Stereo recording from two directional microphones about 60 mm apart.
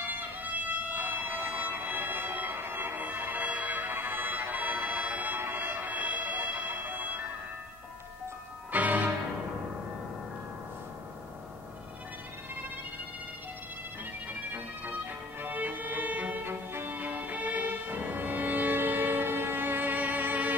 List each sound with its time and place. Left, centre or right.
0.1 s music: right
8.7 s music: right
15.4 s violin: right